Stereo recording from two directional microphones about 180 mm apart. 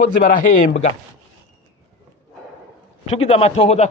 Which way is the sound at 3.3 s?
35° left (ahead or behind).